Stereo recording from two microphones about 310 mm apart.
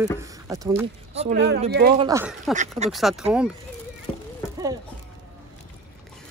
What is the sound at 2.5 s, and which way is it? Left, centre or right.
Speech, right.